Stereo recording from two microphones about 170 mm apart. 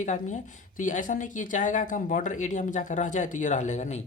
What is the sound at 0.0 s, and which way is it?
Speech, 45° left (ahead or behind).